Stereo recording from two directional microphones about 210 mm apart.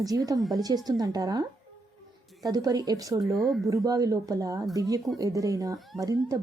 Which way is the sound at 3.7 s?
15° right (ahead or behind).